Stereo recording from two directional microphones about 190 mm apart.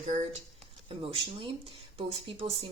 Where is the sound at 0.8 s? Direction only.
30° right (ahead or behind).